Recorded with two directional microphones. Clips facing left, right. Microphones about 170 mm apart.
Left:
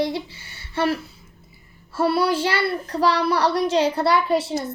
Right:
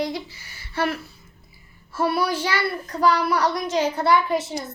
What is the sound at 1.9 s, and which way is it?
Child singing, 30° left (ahead or behind).